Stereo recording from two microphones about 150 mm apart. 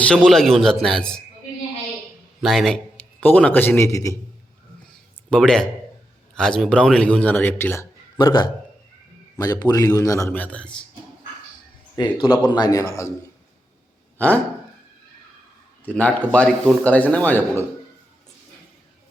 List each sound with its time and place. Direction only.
0.0 s a man's voice: 5° left (ahead or behind)
2.4 s a man's voice: centre (ahead or behind); by 4.2 s 20° left (ahead or behind)
5.3 s a man's voice: 5° left (ahead or behind)
8.2 s a man's voice: 30° left (ahead or behind)
10.3 s speech: 10° left (ahead or behind)
12.0 s a man's voice: 30° left (ahead or behind)
15.8 s speech: 10° left (ahead or behind)